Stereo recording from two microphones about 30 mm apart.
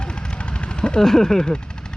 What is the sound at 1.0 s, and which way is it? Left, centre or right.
Speech, centre.